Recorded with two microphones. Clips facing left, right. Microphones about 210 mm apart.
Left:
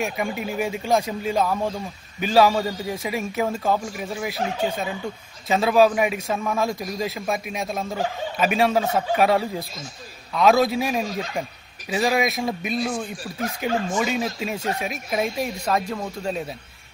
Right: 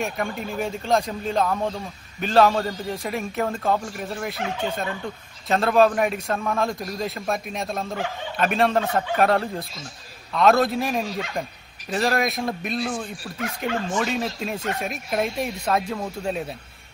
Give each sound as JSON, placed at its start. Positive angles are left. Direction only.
{"t": 0.0, "sound": "a man's voice", "side_deg": 5}
{"t": 5.5, "sound": "a man's voice", "side_deg": 5}
{"t": 11.1, "sound": "speech", "side_deg": 40}
{"t": 11.9, "sound": "a man's voice", "side_deg": 5}